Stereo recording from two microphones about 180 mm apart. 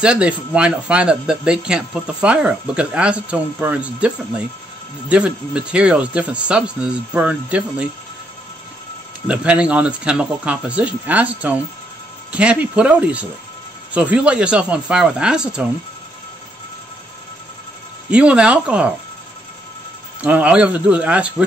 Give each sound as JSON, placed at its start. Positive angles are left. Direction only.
{"t": 0.0, "sound": "speech", "side_deg": -5}
{"t": 5.1, "sound": "speech", "side_deg": -5}
{"t": 9.3, "sound": "speech", "side_deg": -5}
{"t": 18.1, "sound": "speech", "side_deg": -5}
{"t": 20.2, "sound": "speech", "side_deg": -10}